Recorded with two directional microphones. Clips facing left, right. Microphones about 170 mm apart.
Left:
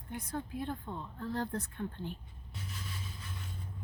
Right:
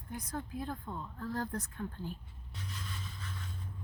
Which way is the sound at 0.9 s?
30° left (ahead or behind).